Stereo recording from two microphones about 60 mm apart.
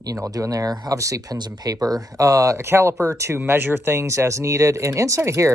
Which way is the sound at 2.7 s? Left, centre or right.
Right.